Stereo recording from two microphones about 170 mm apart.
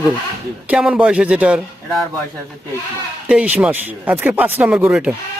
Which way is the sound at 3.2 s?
5° right (ahead or behind).